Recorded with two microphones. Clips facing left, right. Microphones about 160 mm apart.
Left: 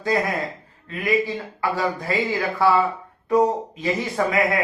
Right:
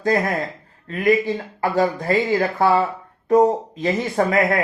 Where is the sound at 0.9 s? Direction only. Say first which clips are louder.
Right 4 dB; 45° right (ahead or behind).